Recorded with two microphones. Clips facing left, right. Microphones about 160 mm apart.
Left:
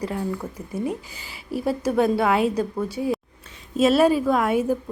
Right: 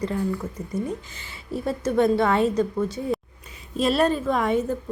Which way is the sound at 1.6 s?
5° left (ahead or behind).